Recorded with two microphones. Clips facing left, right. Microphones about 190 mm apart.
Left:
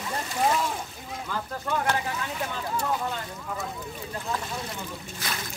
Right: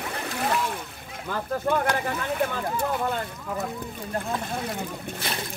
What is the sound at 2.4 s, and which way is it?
Speech, 55° right (ahead or behind).